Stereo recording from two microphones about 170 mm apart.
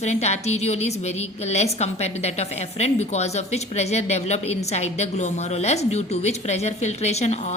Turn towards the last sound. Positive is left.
turn(degrees=40)  # may be behind; listen again after turning